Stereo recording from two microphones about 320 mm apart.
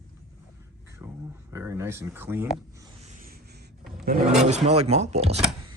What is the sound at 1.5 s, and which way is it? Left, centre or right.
Speech, centre.